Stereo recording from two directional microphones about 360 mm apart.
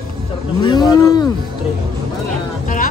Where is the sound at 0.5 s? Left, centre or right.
Centre.